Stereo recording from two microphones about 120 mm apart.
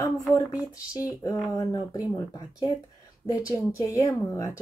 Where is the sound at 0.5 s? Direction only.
15° right (ahead or behind).